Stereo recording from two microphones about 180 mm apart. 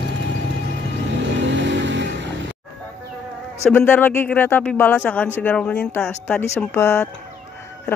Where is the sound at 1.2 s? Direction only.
80° right.